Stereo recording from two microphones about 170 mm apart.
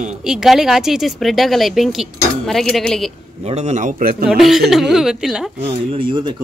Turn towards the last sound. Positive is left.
turn(degrees=-30)  # may be behind; listen again after turning